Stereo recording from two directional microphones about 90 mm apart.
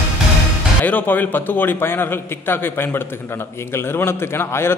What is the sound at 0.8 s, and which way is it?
A man's voice, 20° left (ahead or behind).